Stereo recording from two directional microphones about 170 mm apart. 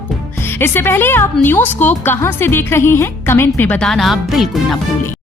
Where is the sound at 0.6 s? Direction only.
15° left (ahead or behind).